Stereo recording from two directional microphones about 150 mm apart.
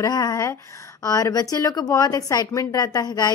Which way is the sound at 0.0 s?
25° left (ahead or behind).